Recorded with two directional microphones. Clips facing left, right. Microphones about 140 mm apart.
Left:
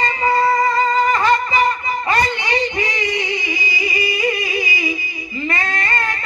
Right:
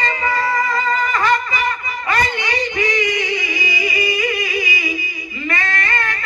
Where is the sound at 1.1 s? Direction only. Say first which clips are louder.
Left 2 dB; 30° left (ahead or behind).